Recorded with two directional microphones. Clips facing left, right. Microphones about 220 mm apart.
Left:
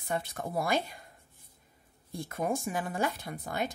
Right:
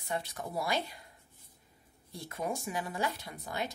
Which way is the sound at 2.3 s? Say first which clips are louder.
Left 4 dB; 50° left (ahead or behind).